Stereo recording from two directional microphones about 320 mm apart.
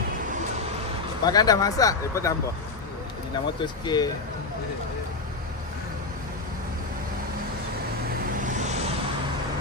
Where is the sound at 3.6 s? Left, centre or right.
Centre.